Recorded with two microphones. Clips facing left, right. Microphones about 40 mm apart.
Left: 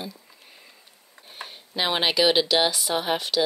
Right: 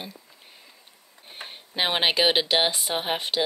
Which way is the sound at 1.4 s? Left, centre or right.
Right.